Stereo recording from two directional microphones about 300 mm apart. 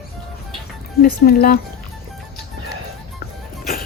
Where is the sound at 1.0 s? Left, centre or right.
Left.